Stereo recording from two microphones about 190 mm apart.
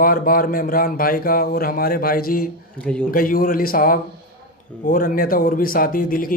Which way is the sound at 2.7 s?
5° left (ahead or behind).